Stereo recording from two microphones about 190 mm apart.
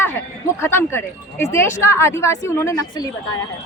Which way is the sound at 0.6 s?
10° left (ahead or behind).